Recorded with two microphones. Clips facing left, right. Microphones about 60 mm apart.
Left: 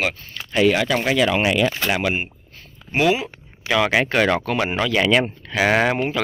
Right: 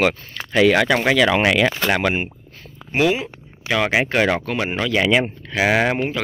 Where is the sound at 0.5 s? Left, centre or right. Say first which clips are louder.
Right 2 dB; right.